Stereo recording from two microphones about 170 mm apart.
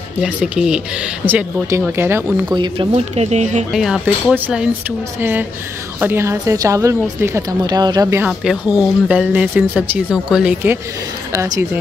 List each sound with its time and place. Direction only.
0.2 s a woman's voice: 5° right (ahead or behind)
2.5 s speech: 30° right (ahead or behind)
3.7 s speech: centre (ahead or behind)
5.9 s a woman's voice: 15° right (ahead or behind)
8.3 s speech: 5° right (ahead or behind)
11.3 s speech: 20° right (ahead or behind)